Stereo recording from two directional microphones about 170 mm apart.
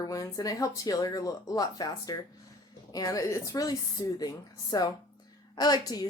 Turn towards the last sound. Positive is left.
turn(degrees=25)  # may be behind; listen again after turning